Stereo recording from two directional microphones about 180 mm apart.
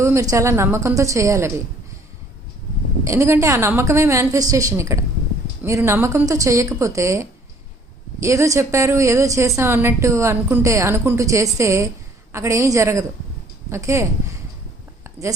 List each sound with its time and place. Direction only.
0.0 s a woman's voice: 15° right (ahead or behind)
3.0 s a woman's voice: 15° right (ahead or behind)